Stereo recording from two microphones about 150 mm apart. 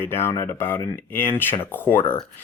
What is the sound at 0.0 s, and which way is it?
Speech, 15° left (ahead or behind).